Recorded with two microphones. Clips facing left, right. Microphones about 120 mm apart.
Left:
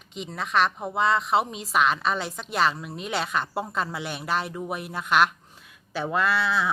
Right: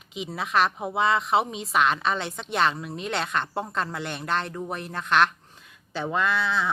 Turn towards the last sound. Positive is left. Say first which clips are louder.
# left 1 dB
turn(degrees=5)  # may be behind; listen again after turning